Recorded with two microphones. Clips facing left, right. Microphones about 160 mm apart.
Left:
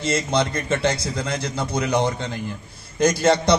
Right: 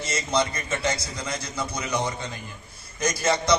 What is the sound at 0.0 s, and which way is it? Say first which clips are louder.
A man's voice: left 4 dB; 55° left (ahead or behind).